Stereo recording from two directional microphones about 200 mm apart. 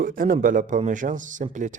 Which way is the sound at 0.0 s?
45° right (ahead or behind).